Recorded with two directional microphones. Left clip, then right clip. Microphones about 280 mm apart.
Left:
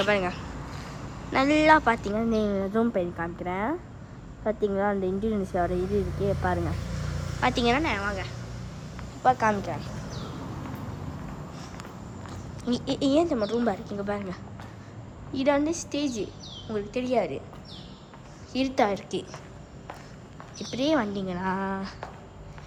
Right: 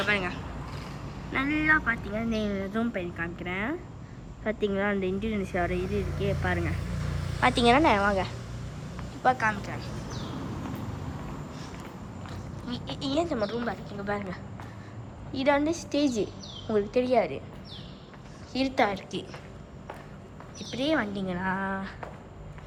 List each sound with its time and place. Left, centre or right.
0.0 s a woman's voice: centre
2.1 s speech: centre
9.2 s a woman's voice: centre
12.6 s a woman's voice: left
18.5 s a woman's voice: centre
20.7 s a woman's voice: centre